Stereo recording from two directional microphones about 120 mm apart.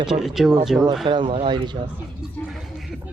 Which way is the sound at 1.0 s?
40° right (ahead or behind).